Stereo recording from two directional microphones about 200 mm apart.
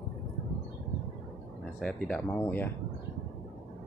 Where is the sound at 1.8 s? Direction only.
5° left (ahead or behind).